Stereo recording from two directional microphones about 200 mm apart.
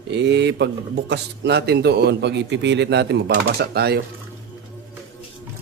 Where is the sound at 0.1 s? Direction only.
60° right (ahead or behind).